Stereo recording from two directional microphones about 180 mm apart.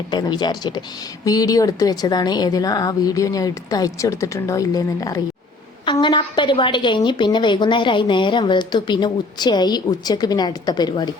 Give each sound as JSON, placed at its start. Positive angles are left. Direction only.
{"t": 0.1, "sound": "a woman's voice", "side_deg": 25}